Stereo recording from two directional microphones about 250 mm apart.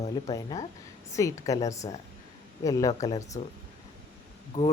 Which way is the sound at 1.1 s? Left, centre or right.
Centre.